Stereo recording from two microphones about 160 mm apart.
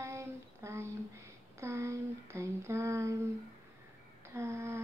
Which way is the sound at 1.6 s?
15° right (ahead or behind).